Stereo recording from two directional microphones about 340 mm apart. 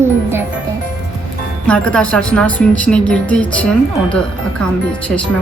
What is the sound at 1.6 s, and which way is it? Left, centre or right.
Speech, centre.